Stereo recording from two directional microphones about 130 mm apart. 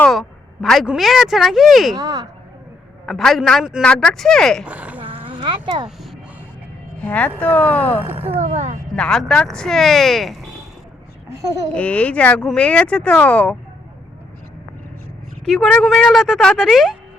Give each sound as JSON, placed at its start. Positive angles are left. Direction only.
{"t": 0.1, "sound": "a woman's voice", "side_deg": 0}
{"t": 2.0, "sound": "speech", "side_deg": -30}
{"t": 3.1, "sound": "a woman's voice", "side_deg": 0}
{"t": 4.6, "sound": "a sound", "side_deg": -10}
{"t": 5.0, "sound": "a sound", "side_deg": -45}
{"t": 7.0, "sound": "speech", "side_deg": 10}
{"t": 8.3, "sound": "speech", "side_deg": -55}
{"t": 9.0, "sound": "a woman's voice", "side_deg": 5}
{"t": 11.4, "sound": "speech", "side_deg": -30}
{"t": 11.7, "sound": "speech", "side_deg": 10}
{"t": 15.4, "sound": "a woman's voice", "side_deg": 5}